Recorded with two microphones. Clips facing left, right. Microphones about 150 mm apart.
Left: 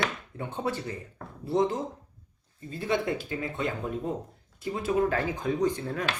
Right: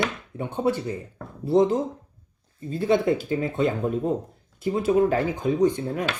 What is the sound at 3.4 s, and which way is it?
Chopping, 20° right (ahead or behind).